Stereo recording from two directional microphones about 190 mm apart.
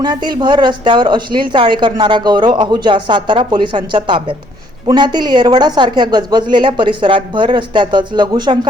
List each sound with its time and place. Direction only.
0.0 s speech: 25° right (ahead or behind)